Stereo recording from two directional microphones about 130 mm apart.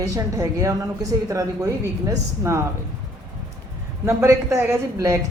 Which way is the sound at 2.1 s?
25° right (ahead or behind).